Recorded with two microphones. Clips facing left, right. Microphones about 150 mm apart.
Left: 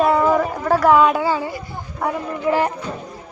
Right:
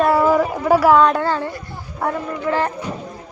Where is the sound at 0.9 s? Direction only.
5° left (ahead or behind).